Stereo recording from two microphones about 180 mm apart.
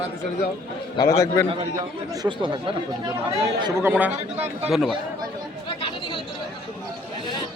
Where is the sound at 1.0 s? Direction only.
15° left (ahead or behind).